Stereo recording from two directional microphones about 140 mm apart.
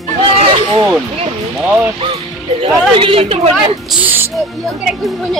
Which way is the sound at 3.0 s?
40° right (ahead or behind).